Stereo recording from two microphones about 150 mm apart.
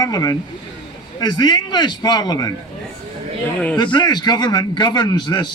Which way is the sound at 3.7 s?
30° left (ahead or behind).